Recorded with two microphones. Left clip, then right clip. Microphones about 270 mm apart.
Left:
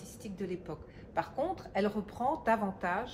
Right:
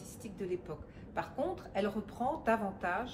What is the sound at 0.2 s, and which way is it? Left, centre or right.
A woman's voice, left.